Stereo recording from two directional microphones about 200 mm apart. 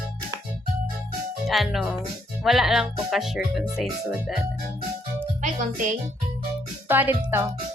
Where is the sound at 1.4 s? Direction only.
Centre (ahead or behind).